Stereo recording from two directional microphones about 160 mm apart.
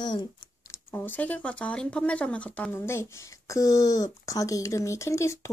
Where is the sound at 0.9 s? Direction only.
10° left (ahead or behind).